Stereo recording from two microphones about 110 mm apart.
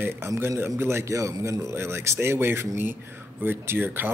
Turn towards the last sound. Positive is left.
turn(degrees=-20)  # may be behind; listen again after turning